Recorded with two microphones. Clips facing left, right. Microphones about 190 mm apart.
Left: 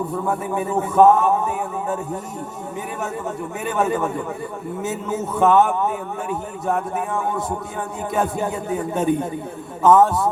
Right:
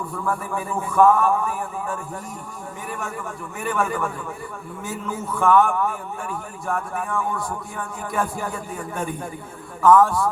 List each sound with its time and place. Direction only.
0.1 s a man's voice: 20° left (ahead or behind)
3.6 s a man's voice: 20° left (ahead or behind)